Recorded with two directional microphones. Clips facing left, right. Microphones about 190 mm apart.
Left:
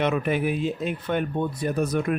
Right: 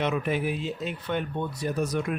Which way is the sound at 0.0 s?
60° left (ahead or behind).